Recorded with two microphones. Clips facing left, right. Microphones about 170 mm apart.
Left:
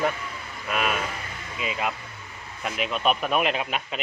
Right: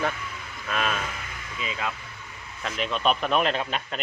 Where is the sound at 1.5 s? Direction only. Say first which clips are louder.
Left 3 dB; 20° left (ahead or behind).